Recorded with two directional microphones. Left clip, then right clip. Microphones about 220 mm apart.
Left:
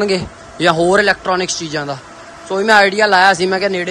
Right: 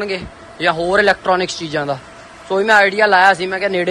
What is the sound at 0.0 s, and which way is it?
A man's voice, 15° left (ahead or behind).